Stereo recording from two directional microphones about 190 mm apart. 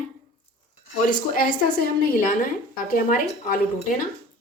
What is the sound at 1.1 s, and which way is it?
Speech, 50° left (ahead or behind).